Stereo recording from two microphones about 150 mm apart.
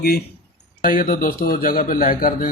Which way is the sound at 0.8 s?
65° left (ahead or behind).